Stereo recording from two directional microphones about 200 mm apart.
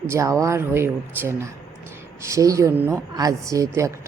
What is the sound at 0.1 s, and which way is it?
A woman's voice, 15° right (ahead or behind).